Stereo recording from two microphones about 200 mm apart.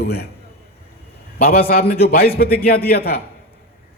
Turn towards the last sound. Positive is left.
turn(degrees=50)  # may be behind; listen again after turning